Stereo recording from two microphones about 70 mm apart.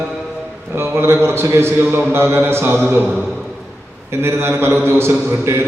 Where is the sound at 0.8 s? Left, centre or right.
Right.